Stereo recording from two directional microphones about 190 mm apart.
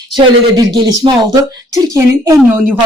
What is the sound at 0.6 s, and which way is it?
Speech, 20° right (ahead or behind).